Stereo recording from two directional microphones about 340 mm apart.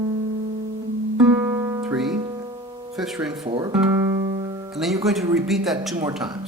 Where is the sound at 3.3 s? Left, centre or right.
Centre.